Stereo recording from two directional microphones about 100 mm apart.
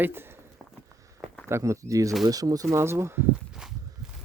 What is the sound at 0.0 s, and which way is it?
Speech, 20° right (ahead or behind).